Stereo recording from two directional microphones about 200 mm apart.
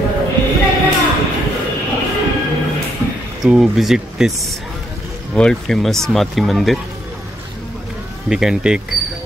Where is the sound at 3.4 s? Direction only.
Centre (ahead or behind).